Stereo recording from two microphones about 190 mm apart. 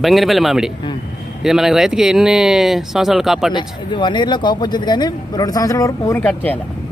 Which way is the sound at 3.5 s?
25° left (ahead or behind).